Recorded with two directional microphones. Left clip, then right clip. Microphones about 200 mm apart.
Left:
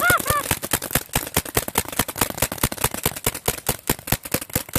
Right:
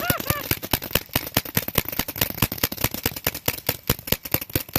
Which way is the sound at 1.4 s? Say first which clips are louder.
Left 2 dB; 35° left (ahead or behind).